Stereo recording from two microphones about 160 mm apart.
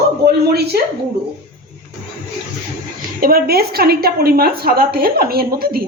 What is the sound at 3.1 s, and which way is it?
A woman's voice, 65° right (ahead or behind).